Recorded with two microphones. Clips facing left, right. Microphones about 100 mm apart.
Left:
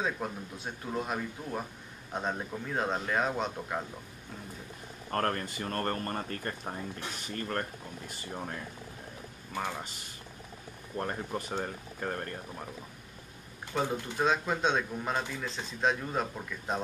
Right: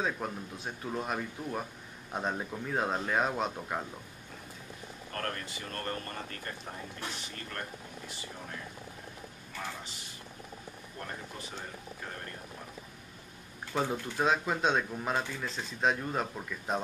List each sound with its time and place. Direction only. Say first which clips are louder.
0.2 s speech: even; centre (ahead or behind)
5.1 s speech: left 7 dB; 45° left (ahead or behind)
11.0 s speech: left 9 dB; 45° left (ahead or behind)
13.7 s speech: even; centre (ahead or behind)